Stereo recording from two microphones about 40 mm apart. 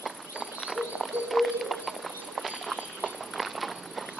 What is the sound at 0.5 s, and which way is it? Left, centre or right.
Clip-clop, centre.